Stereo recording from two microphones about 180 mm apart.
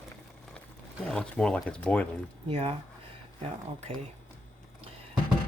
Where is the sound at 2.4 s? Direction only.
30° right (ahead or behind).